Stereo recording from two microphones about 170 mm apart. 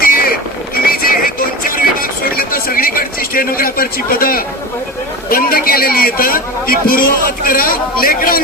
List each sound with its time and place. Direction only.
0.0 s boat: 60° left (ahead or behind)
0.9 s music: 60° left (ahead or behind)
5.3 s a man's voice: 60° left (ahead or behind)